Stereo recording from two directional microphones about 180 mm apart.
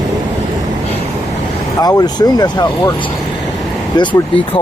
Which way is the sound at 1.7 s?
20° left (ahead or behind).